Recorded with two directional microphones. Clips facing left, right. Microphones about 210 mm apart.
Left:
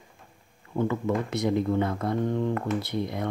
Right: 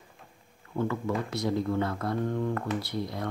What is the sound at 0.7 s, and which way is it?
Speech, 20° left (ahead or behind).